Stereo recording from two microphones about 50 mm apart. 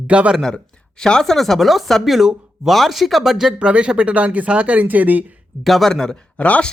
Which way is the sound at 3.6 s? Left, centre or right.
Right.